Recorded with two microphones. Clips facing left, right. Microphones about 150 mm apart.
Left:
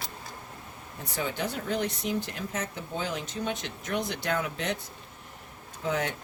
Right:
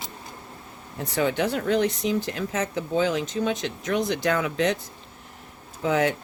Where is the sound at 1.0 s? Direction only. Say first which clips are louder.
Right 8 dB; 70° right (ahead or behind); by 4.8 s 90° right.